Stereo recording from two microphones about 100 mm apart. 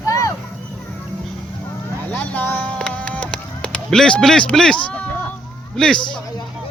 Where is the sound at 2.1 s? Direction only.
15° left (ahead or behind).